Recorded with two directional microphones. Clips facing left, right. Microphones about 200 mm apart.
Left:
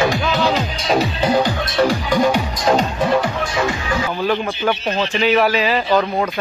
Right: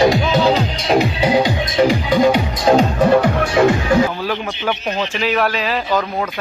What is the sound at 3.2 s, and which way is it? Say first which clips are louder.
Speech: right 6 dB; 55° right (ahead or behind).